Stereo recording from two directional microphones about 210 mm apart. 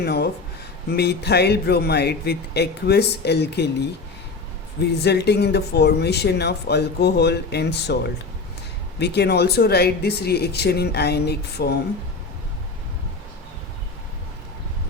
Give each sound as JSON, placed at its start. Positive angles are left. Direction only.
{"t": 0.0, "sound": "speech", "side_deg": 50}
{"t": 9.0, "sound": "speech", "side_deg": 50}